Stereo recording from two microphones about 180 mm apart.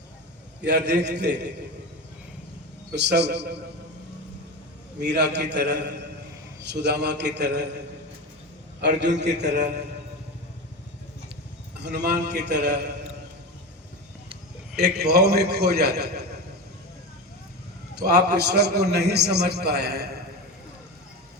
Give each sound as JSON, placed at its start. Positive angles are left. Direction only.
{"t": 0.6, "sound": "a man's voice", "side_deg": -70}
{"t": 2.9, "sound": "a man's voice", "side_deg": -70}
{"t": 4.9, "sound": "a man's voice", "side_deg": -70}
{"t": 9.1, "sound": "a man's voice", "side_deg": -70}
{"t": 11.8, "sound": "a man's voice", "side_deg": -70}
{"t": 14.8, "sound": "a man's voice", "side_deg": -60}
{"t": 18.0, "sound": "a man's voice", "side_deg": -65}